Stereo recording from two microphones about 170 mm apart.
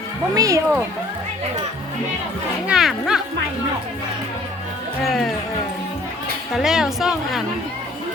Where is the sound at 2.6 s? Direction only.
5° right (ahead or behind).